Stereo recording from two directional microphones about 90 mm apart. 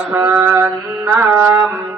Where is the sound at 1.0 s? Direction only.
30° right (ahead or behind).